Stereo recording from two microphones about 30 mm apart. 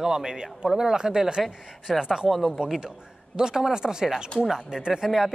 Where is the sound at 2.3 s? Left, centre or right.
Centre.